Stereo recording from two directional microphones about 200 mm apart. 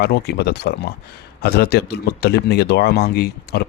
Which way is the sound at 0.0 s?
50° left (ahead or behind).